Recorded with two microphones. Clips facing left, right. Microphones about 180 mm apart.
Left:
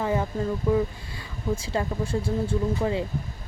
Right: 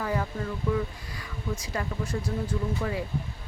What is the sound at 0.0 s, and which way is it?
Speech, 25° left (ahead or behind).